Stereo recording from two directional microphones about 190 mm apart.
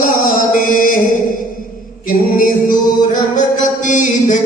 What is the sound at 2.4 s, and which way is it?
Music, 45° left (ahead or behind).